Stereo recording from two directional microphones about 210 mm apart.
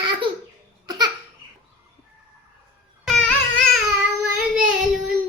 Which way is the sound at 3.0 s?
Centre (ahead or behind).